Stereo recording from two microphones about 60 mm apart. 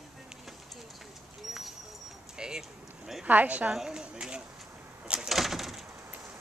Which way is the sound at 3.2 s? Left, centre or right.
Right.